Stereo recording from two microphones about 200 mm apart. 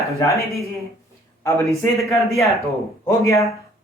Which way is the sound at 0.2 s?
15° left (ahead or behind).